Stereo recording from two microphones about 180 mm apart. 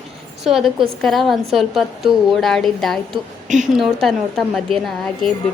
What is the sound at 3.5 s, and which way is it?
Speech, 45° right (ahead or behind).